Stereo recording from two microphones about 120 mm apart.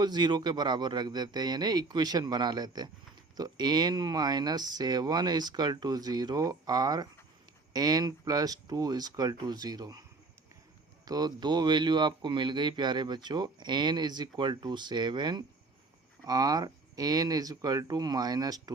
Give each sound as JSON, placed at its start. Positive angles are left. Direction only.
{"t": 0.0, "sound": "speech", "side_deg": -35}
{"t": 11.0, "sound": "speech", "side_deg": -35}